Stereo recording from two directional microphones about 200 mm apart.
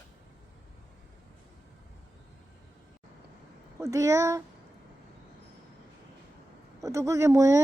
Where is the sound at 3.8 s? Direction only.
15° right (ahead or behind).